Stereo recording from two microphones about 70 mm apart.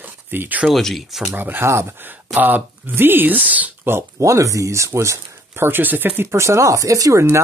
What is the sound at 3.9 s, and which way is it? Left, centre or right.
Speech, right.